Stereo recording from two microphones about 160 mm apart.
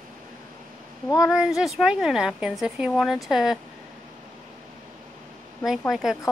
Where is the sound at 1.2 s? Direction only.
5° right (ahead or behind).